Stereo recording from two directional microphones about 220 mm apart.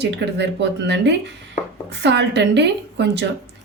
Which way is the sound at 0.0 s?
50° right (ahead or behind).